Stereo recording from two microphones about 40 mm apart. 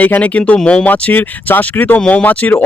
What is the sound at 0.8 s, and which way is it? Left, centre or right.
Speech, left.